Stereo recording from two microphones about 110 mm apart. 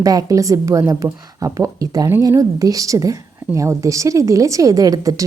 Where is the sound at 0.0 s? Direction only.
35° right (ahead or behind).